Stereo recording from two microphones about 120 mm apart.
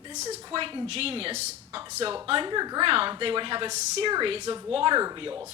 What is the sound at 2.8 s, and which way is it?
Speech, 50° right (ahead or behind).